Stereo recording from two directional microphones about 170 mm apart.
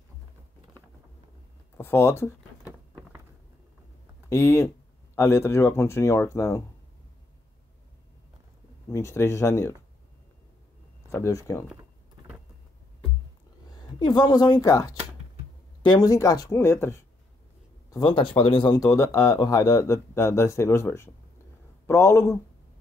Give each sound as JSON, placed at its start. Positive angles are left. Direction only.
{"t": 1.8, "sound": "speech", "side_deg": 15}
{"t": 4.3, "sound": "speech", "side_deg": 15}
{"t": 8.9, "sound": "speech", "side_deg": 15}
{"t": 11.1, "sound": "speech", "side_deg": 15}
{"t": 13.7, "sound": "a woman's voice", "side_deg": 25}
{"t": 17.8, "sound": "speech", "side_deg": 25}